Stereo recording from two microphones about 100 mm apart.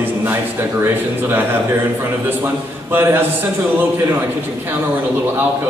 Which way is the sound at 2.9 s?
25° right (ahead or behind).